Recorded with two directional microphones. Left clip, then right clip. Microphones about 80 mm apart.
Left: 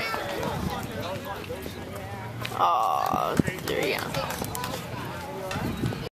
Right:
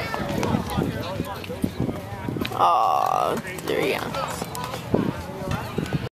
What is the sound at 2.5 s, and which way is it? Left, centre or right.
Grunt, right.